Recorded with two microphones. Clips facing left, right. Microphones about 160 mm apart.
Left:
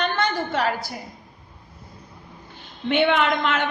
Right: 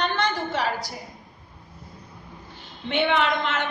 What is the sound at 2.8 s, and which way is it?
Speech, 55° left (ahead or behind).